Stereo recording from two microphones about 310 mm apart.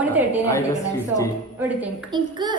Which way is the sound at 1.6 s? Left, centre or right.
Centre.